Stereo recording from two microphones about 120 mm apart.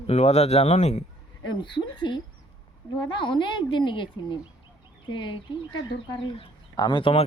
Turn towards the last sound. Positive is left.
turn(degrees=45)  # may be behind; listen again after turning